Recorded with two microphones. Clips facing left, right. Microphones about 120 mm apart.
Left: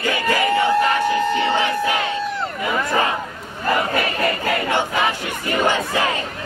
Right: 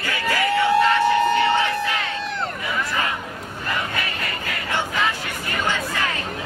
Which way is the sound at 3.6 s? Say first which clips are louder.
Left 8 dB; 40° left (ahead or behind).